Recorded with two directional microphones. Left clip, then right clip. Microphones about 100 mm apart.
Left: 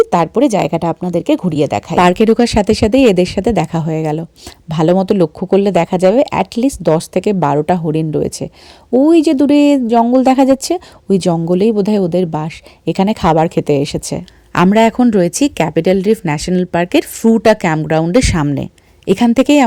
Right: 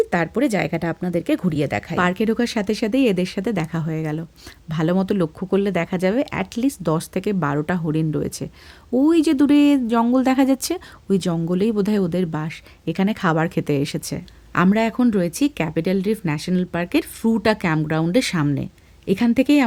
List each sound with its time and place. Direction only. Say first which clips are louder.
0.1 s a woman's voice: left 9 dB; 35° left (ahead or behind)
2.0 s a woman's voice: left 11 dB; 90° left; by 8.4 s 40° left (ahead or behind)
8.9 s a woman's voice: left 7 dB; 30° left (ahead or behind)
14.5 s speech: left 9 dB; 85° left
14.9 s speech: left 8 dB; 55° left (ahead or behind)
18.5 s speech: left 7 dB; 70° left (ahead or behind)